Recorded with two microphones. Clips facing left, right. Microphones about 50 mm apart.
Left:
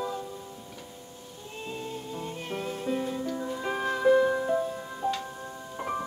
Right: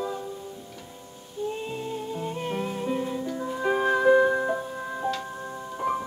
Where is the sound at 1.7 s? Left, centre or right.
Centre.